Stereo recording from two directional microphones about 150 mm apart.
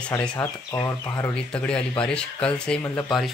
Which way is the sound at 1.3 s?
5° left (ahead or behind).